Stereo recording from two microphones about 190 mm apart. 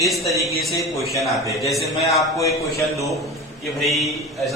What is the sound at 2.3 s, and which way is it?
Speech, 15° left (ahead or behind).